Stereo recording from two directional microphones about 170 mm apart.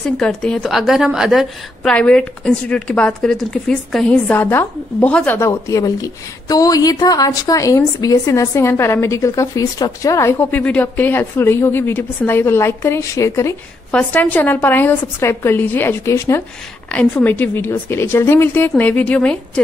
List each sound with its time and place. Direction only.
0.2 s a woman's voice: 5° left (ahead or behind)